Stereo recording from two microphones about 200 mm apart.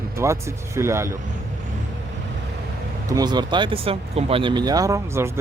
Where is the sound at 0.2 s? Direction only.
15° right (ahead or behind).